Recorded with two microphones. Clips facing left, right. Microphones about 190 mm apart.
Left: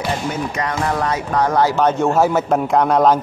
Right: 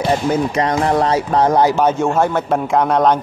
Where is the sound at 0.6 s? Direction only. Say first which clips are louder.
Right 5 dB; 30° right (ahead or behind).